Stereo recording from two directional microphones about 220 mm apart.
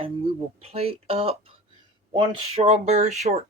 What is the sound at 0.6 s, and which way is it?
Speech, 25° right (ahead or behind).